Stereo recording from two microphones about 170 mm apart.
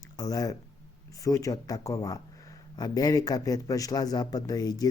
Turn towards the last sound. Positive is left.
turn(degrees=20)  # may be behind; listen again after turning